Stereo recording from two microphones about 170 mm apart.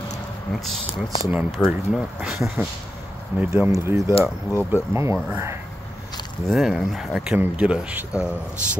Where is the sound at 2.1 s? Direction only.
10° right (ahead or behind).